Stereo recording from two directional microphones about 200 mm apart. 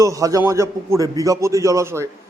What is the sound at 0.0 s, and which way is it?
Speech, 15° right (ahead or behind).